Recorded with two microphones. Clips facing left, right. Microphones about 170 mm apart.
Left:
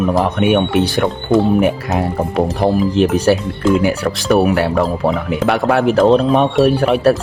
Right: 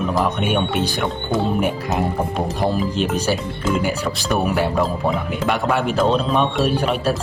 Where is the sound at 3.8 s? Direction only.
70° left (ahead or behind).